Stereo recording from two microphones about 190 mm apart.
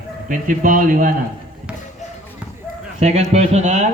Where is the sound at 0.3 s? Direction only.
45° right (ahead or behind).